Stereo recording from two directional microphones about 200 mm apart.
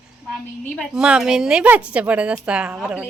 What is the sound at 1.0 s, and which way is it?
A woman's voice, 5° right (ahead or behind).